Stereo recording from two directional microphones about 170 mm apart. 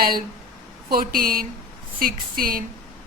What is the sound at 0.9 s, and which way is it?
Speech, 60° right (ahead or behind).